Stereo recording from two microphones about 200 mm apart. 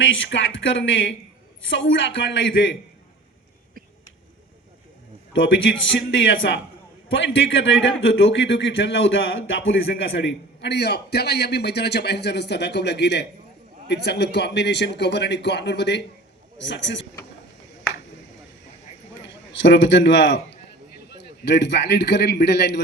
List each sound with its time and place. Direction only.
0.0 s a man's voice: 70° left (ahead or behind)
6.1 s a man's voice: 65° left (ahead or behind)
19.2 s a man's voice: 60° left (ahead or behind)